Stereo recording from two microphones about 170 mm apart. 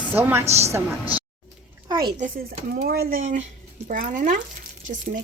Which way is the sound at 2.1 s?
50° right (ahead or behind).